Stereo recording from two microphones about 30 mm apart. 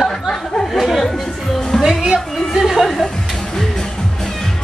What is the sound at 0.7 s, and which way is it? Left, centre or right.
Speech, centre.